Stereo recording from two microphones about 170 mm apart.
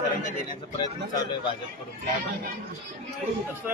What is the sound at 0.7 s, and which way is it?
Speech, 25° left (ahead or behind).